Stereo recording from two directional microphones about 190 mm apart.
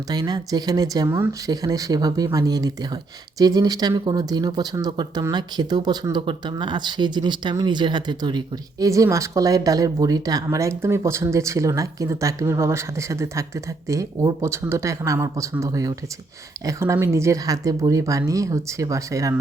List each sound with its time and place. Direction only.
0.1 s speech: 20° right (ahead or behind)